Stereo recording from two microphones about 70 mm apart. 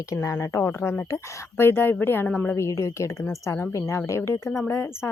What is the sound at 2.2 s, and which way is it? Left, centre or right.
Speech, centre.